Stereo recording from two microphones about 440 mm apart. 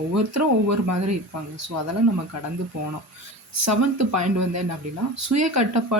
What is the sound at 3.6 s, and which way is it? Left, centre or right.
Speech, right.